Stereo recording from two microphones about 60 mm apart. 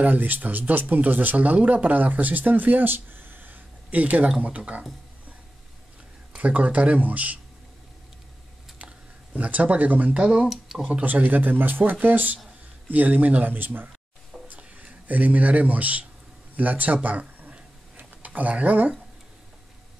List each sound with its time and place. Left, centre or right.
0.0 s speech: right
6.3 s speech: right
8.7 s speech: right
10.5 s speech: centre
10.9 s speech: right
14.5 s a sound: right
15.0 s speech: right
16.5 s a sound: right